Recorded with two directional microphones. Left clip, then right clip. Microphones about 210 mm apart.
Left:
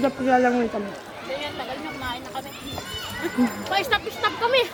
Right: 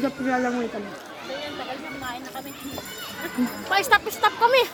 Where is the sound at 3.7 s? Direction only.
45° right (ahead or behind).